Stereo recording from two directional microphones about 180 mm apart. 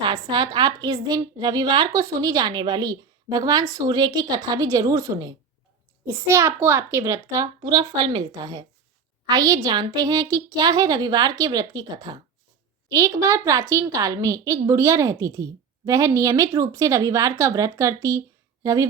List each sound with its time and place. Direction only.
0.0 s a woman's voice: 25° right (ahead or behind)